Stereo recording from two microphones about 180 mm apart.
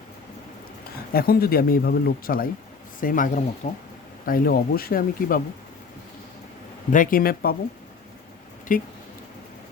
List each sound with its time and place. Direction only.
1.1 s speech: 55° left (ahead or behind)
6.9 s speech: 50° left (ahead or behind)
8.7 s speech: 50° left (ahead or behind)